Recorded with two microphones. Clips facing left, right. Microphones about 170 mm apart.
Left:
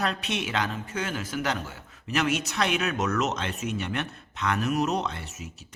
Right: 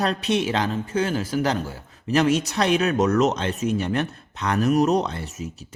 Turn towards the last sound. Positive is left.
turn(degrees=-35)  # may be behind; listen again after turning